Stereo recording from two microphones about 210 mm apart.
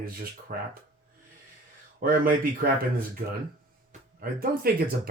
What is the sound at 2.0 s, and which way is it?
Speech, 40° right (ahead or behind).